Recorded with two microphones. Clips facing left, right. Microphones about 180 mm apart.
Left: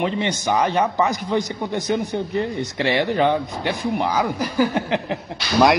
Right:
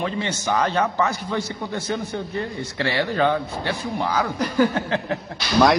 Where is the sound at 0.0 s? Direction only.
20° left (ahead or behind).